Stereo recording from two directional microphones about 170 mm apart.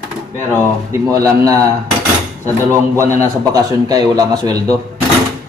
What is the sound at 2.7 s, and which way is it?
A man's voice, 15° right (ahead or behind).